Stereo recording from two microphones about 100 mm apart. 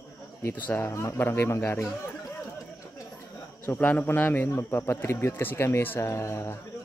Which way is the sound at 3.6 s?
20° left (ahead or behind).